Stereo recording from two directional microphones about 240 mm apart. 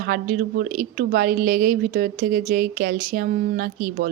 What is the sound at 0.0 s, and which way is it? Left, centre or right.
Speech, right.